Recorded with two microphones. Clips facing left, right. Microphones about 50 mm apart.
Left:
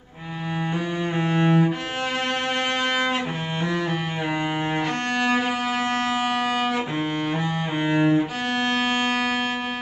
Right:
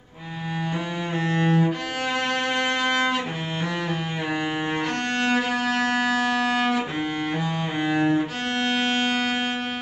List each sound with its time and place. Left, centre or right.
1.1 s cello: centre
5.2 s music: centre
7.8 s music: centre